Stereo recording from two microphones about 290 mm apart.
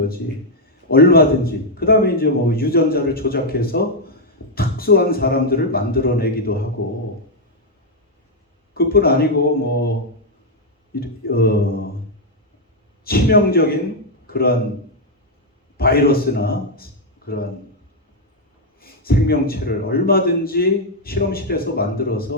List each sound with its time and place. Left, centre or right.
0.9 s a man's voice: left
8.7 s a man's voice: left
10.9 s a man's voice: left
13.1 s a man's voice: left
15.8 s a man's voice: left
18.8 s a man's voice: left